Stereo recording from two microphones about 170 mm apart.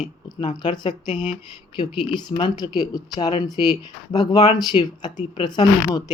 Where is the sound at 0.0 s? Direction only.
25° left (ahead or behind).